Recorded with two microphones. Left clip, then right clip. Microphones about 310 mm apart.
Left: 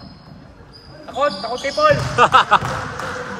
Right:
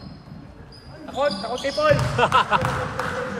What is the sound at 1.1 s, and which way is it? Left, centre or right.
Speech, left.